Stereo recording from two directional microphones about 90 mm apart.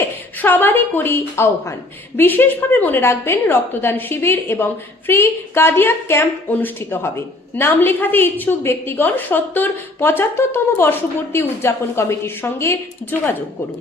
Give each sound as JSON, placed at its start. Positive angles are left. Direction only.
{"t": 0.3, "sound": "a woman's voice", "side_deg": 20}